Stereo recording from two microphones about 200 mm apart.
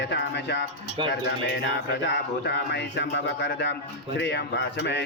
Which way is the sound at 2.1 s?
60° left (ahead or behind).